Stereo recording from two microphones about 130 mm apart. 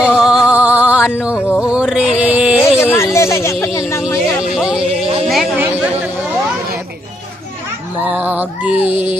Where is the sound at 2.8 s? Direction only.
20° left (ahead or behind).